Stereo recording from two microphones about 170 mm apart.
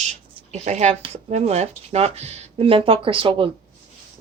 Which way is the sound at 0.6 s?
40° right (ahead or behind).